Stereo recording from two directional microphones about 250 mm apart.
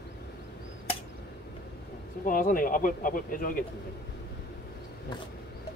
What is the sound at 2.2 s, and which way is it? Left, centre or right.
Speech, left.